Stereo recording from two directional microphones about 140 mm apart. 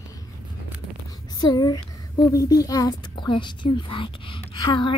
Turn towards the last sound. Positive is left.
turn(degrees=35)  # may be behind; listen again after turning